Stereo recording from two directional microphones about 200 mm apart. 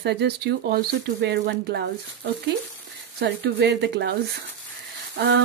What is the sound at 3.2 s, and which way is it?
Speech, 55° right (ahead or behind).